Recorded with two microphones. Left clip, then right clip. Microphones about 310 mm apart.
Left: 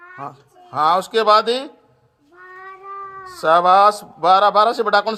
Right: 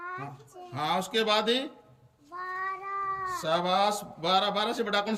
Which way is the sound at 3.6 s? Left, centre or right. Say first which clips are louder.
Left 15 dB; left.